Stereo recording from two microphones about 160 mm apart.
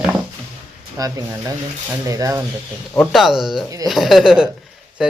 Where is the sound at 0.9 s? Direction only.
20° right (ahead or behind).